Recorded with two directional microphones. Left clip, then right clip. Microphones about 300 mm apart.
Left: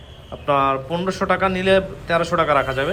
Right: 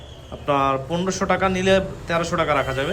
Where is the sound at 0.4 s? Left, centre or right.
Centre.